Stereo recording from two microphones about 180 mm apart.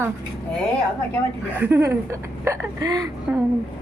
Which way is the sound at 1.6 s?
15° right (ahead or behind).